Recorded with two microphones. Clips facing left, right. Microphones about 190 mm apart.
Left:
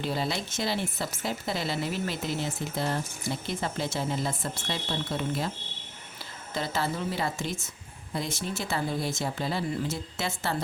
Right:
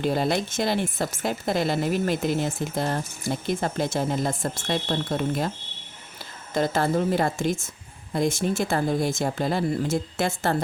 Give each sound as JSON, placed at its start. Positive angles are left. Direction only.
{"t": 0.0, "sound": "speech", "side_deg": -50}
{"t": 6.5, "sound": "speech", "side_deg": -50}